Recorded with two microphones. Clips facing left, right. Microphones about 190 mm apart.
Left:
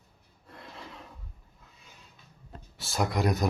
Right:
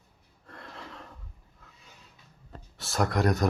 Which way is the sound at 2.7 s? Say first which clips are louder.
Right 2 dB; centre (ahead or behind).